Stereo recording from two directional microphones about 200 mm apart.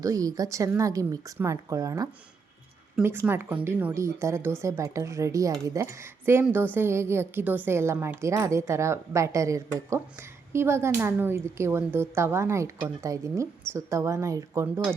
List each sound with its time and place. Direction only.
0.0 s a woman's voice: 15° right (ahead or behind)